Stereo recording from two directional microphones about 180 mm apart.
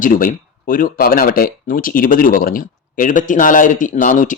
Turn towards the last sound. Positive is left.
turn(degrees=45)  # may be behind; listen again after turning